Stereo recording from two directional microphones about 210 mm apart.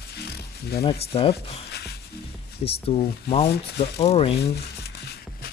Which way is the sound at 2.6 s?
25° left (ahead or behind).